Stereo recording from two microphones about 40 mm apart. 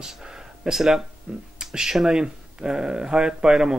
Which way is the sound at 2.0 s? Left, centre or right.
Right.